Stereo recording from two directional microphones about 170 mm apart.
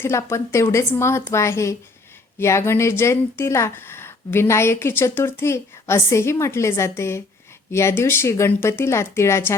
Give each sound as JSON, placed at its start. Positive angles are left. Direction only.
{"t": 0.0, "sound": "a woman's voice", "side_deg": 15}